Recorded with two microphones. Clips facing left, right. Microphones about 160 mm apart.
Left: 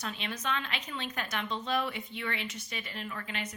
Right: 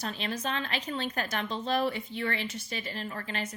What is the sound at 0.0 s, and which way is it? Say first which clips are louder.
A woman's voice: right 3 dB; 35° right (ahead or behind).